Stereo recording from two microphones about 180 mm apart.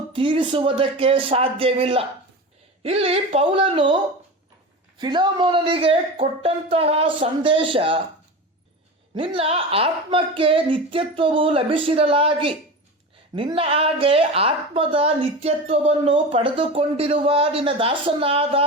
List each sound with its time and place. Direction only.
0.1 s a woman's voice: 25° right (ahead or behind)
4.9 s a woman's voice: 25° right (ahead or behind)
9.1 s a woman's voice: 30° right (ahead or behind)